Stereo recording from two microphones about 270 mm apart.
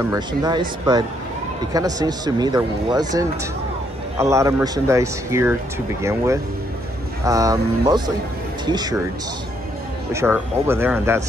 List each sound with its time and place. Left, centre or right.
0.0 s speech: centre
10.1 s speech: centre